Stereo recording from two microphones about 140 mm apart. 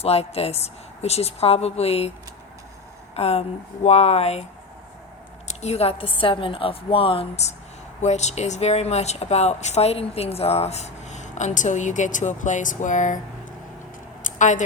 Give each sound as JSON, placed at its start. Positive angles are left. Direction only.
{"t": 0.0, "sound": "speech", "side_deg": 45}
{"t": 3.2, "sound": "speech", "side_deg": 45}
{"t": 5.6, "sound": "a woman's voice", "side_deg": 45}
{"t": 14.3, "sound": "speech", "side_deg": 65}